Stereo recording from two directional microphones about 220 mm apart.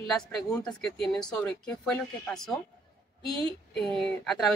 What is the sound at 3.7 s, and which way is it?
Speech, centre (ahead or behind).